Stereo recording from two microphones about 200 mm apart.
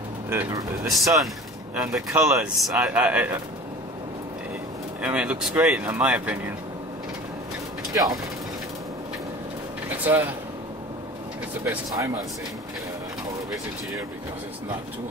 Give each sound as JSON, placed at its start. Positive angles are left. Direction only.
{"t": 0.3, "sound": "speech", "side_deg": -15}
{"t": 0.8, "sound": "speech", "side_deg": 0}
{"t": 5.0, "sound": "speech", "side_deg": -5}
{"t": 7.9, "sound": "speech", "side_deg": -20}
{"t": 9.8, "sound": "a sound", "side_deg": -10}
{"t": 11.6, "sound": "speech", "side_deg": -15}